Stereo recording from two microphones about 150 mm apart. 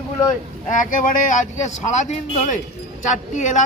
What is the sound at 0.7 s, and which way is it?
A man's voice, 60° left (ahead or behind).